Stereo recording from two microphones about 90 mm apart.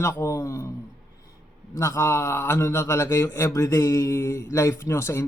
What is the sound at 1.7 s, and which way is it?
Speech, 35° left (ahead or behind).